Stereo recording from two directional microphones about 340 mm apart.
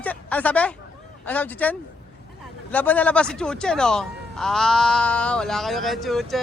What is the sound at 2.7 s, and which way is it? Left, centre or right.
Speech, centre.